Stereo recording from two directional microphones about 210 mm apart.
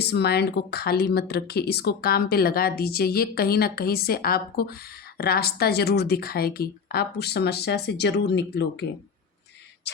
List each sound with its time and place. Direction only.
0.0 s speech: 50° left (ahead or behind)